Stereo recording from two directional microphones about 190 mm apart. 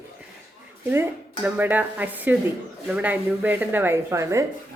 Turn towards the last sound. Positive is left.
turn(degrees=-15)  # may be behind; listen again after turning